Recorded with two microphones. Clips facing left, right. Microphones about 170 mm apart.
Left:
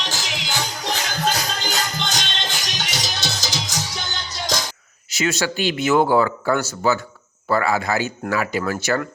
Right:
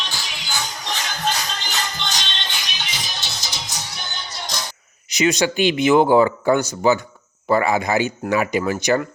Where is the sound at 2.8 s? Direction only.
85° left.